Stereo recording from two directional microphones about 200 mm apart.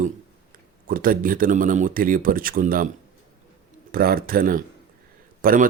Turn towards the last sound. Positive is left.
turn(degrees=-45)  # may be behind; listen again after turning